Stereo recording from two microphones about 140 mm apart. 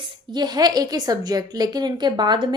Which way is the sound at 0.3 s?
30° right (ahead or behind).